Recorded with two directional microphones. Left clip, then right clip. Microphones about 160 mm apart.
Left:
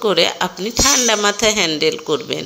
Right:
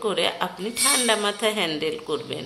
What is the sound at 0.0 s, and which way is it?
Speech, 35° left (ahead or behind).